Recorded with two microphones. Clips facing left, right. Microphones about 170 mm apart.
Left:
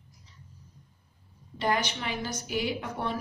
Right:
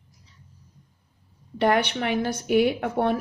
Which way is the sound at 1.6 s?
60° right (ahead or behind).